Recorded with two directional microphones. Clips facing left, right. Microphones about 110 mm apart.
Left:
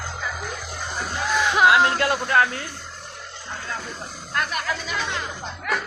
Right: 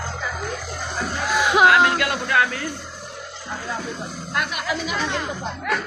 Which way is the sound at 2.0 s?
35° left (ahead or behind).